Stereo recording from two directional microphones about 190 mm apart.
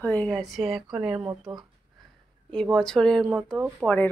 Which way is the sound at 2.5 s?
Centre (ahead or behind).